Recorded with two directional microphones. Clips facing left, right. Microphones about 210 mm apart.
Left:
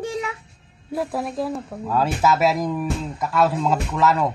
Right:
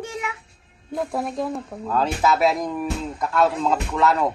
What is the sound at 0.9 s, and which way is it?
Speech, 5° left (ahead or behind).